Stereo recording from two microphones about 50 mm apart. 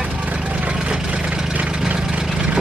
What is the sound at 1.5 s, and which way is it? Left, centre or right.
Vehicle, right.